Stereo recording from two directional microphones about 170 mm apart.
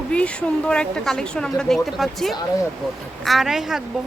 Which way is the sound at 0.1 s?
5° left (ahead or behind).